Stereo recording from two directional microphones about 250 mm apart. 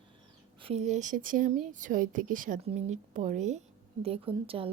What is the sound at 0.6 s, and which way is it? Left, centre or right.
A woman's voice, right.